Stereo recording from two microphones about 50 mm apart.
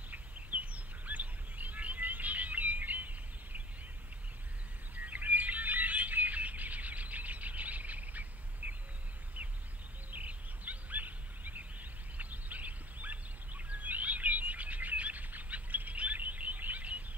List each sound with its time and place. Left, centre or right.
0.1 s bird: right
4.9 s bird: right
10.1 s a sound: right